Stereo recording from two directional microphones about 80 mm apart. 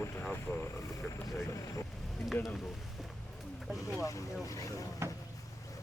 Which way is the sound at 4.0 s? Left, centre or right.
Left.